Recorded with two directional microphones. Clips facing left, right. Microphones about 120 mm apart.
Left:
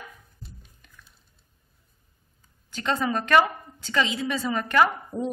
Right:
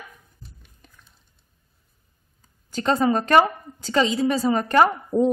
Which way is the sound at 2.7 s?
35° right (ahead or behind).